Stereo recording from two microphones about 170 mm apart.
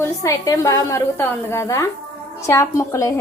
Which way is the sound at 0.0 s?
20° left (ahead or behind).